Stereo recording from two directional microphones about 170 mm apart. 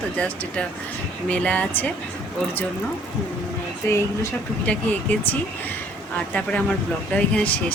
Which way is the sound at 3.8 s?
10° left (ahead or behind).